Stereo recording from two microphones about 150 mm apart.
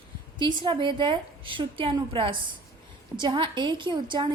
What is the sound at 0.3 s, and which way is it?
A woman's voice, 30° right (ahead or behind).